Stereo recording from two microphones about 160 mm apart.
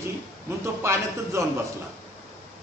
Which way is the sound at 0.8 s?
15° right (ahead or behind).